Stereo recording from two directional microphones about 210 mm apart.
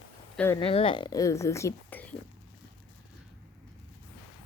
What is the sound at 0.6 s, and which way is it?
A woman's voice, 25° left (ahead or behind).